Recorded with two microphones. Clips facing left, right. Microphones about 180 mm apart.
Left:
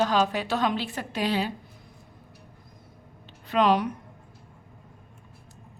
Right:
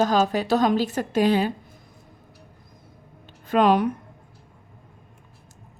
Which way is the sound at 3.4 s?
50° right (ahead or behind).